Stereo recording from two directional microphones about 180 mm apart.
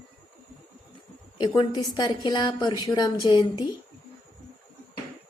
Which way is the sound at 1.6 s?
20° left (ahead or behind).